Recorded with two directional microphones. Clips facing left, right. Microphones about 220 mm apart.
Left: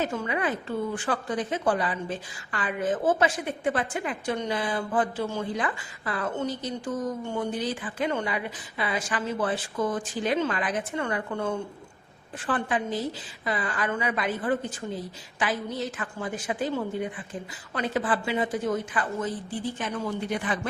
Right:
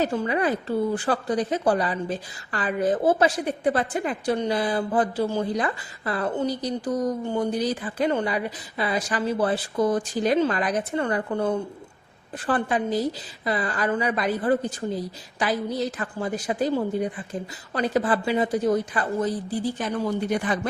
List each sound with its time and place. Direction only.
0.0 s a woman's voice: 35° right (ahead or behind)